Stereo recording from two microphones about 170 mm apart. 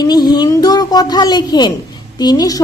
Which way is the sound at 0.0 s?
25° left (ahead or behind).